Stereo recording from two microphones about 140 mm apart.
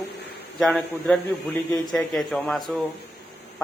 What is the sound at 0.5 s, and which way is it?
A man's voice, centre (ahead or behind).